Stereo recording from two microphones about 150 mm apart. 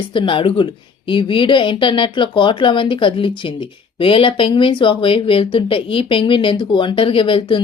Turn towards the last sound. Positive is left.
turn(degrees=35)  # may be behind; listen again after turning